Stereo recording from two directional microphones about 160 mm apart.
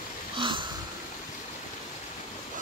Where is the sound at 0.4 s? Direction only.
30° right (ahead or behind).